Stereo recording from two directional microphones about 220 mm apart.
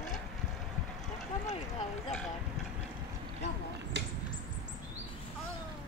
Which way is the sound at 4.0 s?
55° right (ahead or behind).